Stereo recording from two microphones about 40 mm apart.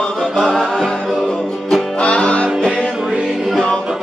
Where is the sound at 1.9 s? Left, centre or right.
Left.